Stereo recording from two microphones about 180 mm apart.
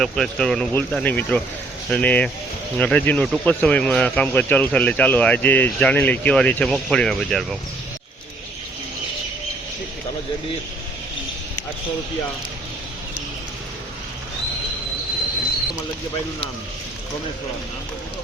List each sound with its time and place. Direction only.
0.0 s speech: centre (ahead or behind)